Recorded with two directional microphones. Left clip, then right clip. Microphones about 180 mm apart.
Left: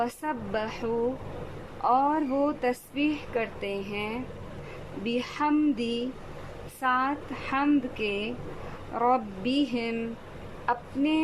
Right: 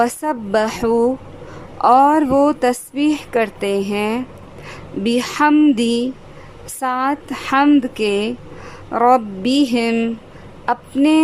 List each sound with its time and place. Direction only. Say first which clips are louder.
0.0 s a woman's voice: right 12 dB; 35° right (ahead or behind)